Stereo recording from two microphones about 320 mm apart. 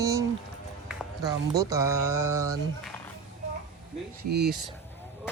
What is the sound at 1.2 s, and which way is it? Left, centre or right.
Speech, centre.